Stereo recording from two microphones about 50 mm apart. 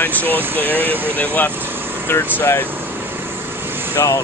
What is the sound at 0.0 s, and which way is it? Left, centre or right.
Speech, left.